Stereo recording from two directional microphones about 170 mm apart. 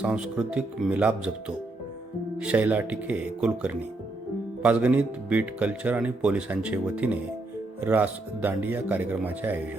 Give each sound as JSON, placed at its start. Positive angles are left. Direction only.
{"t": 0.0, "sound": "speech", "side_deg": -5}